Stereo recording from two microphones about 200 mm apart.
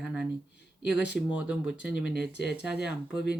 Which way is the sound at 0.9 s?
60° left (ahead or behind).